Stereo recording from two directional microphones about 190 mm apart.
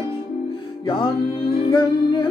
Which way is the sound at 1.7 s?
25° left (ahead or behind).